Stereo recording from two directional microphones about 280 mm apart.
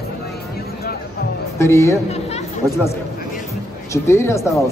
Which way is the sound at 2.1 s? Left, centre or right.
Left.